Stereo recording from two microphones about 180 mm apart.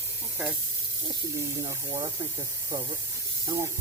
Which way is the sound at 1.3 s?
15° right (ahead or behind).